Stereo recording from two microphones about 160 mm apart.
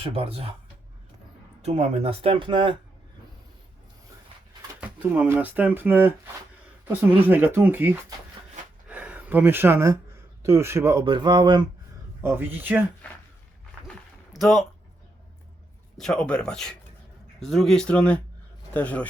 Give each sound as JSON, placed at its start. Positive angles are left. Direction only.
{"t": 0.0, "sound": "speech", "side_deg": -35}
{"t": 1.6, "sound": "speech", "side_deg": -40}
{"t": 4.8, "sound": "speech", "side_deg": -10}
{"t": 11.0, "sound": "speech", "side_deg": -30}
{"t": 12.2, "sound": "speech", "side_deg": -15}
{"t": 14.3, "sound": "speech", "side_deg": 0}
{"t": 16.0, "sound": "speech", "side_deg": 5}